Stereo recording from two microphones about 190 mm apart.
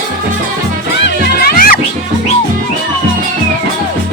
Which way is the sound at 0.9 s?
60° left (ahead or behind).